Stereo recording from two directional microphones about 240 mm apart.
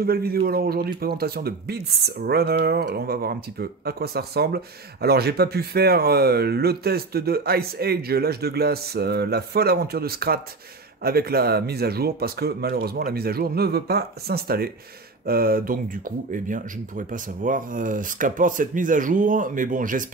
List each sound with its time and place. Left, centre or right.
0.0 s speech: right